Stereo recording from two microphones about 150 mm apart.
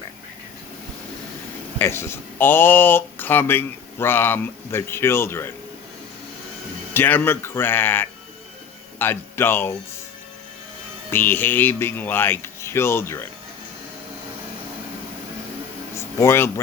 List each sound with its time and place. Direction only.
1.8 s speech: 15° left (ahead or behind)
6.9 s speech: 15° left (ahead or behind)
11.1 s speech: 15° left (ahead or behind)
16.0 s a sound: 15° left (ahead or behind)